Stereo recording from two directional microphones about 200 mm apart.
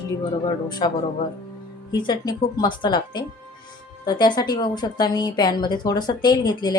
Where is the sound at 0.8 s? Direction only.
30° left (ahead or behind).